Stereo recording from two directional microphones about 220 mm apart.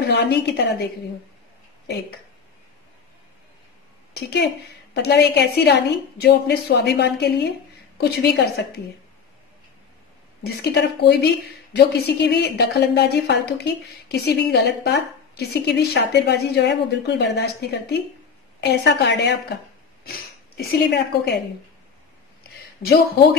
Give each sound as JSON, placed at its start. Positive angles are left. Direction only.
{"t": 0.0, "sound": "a woman's voice", "side_deg": 50}
{"t": 4.1, "sound": "a woman's voice", "side_deg": 50}
{"t": 10.4, "sound": "a woman's voice", "side_deg": 50}
{"t": 22.8, "sound": "a woman's voice", "side_deg": 45}